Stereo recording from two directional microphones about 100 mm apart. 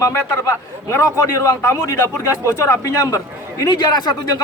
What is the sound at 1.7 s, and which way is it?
A man's voice, 30° left (ahead or behind).